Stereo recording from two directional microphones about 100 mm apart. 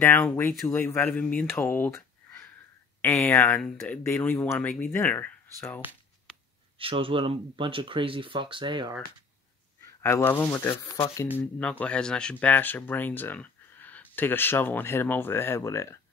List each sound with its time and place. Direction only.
0.0 s speech: 25° left (ahead or behind)
1.6 s a sound: 25° left (ahead or behind)
3.0 s speech: 20° left (ahead or behind)
3.8 s speech: 15° left (ahead or behind)
6.8 s speech: 65° right (ahead or behind)
9.8 s speech: 25° left (ahead or behind)
11.8 s speech: 10° left (ahead or behind); by 16.0 s 30° left (ahead or behind)